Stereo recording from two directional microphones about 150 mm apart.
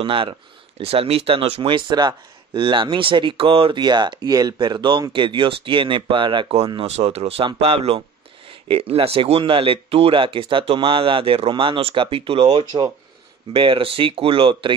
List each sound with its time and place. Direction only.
0.0 s speech: 35° right (ahead or behind)